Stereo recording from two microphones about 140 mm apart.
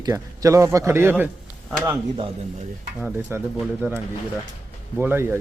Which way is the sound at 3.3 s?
15° right (ahead or behind).